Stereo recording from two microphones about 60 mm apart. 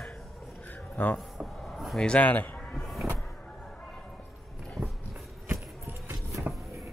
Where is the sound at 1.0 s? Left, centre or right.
Left.